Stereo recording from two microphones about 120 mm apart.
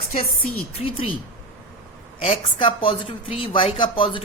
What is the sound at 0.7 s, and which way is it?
Speech, 50° left (ahead or behind).